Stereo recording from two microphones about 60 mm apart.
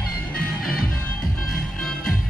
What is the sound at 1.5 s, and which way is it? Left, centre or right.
Music, centre.